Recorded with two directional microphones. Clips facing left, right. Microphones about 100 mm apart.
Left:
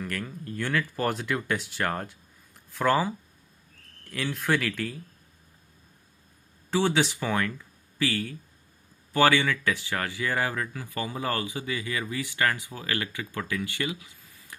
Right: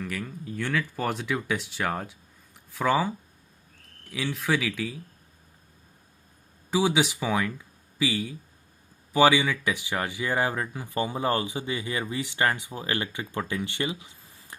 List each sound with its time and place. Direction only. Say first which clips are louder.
0.0 s speech: even; centre (ahead or behind)
6.7 s speech: right 1 dB; 10° right (ahead or behind); by 14.5 s 25° right (ahead or behind)